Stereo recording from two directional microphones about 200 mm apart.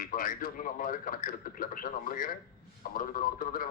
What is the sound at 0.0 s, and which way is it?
Speech, 45° left (ahead or behind).